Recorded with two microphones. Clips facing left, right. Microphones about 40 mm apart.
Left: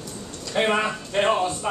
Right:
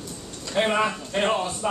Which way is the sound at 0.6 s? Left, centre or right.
Centre.